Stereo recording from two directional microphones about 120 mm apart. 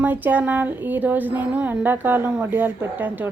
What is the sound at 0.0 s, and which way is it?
Speech, 15° right (ahead or behind).